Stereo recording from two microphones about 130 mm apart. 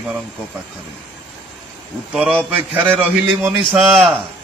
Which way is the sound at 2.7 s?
10° right (ahead or behind).